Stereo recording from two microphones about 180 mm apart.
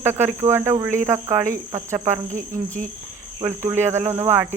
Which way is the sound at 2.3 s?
45° right (ahead or behind).